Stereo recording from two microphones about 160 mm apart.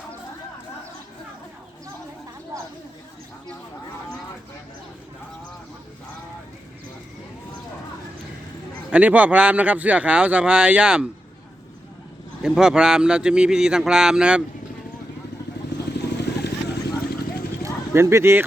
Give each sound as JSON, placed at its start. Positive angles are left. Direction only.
{"t": 8.9, "sound": "speech", "side_deg": -10}
{"t": 12.4, "sound": "a man's voice", "side_deg": -5}
{"t": 16.0, "sound": "vehicle", "side_deg": 90}
{"t": 17.6, "sound": "a sound", "side_deg": -15}